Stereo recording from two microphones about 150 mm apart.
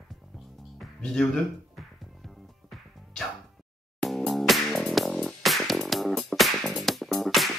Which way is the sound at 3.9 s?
Centre (ahead or behind).